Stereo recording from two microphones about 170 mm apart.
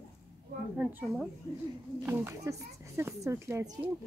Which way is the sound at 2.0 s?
15° right (ahead or behind).